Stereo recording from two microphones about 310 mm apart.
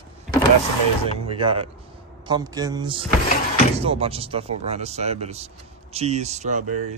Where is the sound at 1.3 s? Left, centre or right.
Centre.